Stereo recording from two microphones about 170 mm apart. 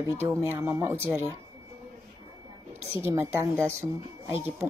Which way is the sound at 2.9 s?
15° right (ahead or behind).